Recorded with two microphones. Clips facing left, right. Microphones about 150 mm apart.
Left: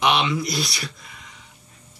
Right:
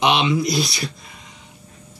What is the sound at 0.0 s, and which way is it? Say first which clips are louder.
Speech: right 3 dB; 25° right (ahead or behind).